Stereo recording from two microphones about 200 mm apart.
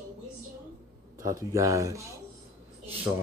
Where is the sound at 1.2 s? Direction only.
15° right (ahead or behind).